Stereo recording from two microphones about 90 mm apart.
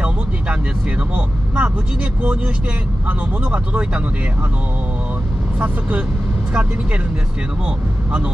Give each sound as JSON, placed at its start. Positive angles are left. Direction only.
{"t": 1.1, "sound": "speech", "side_deg": -15}
{"t": 3.1, "sound": "speech", "side_deg": -15}
{"t": 5.6, "sound": "speech", "side_deg": -15}